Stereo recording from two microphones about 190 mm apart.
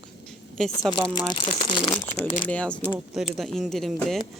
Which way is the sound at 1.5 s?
25° left (ahead or behind).